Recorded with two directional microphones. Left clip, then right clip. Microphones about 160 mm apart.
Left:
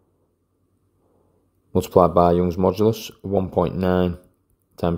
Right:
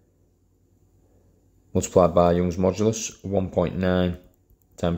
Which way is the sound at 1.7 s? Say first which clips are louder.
Left 3 dB; 25° left (ahead or behind).